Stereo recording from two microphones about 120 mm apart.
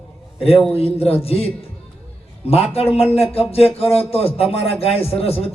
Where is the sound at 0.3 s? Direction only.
55° left (ahead or behind).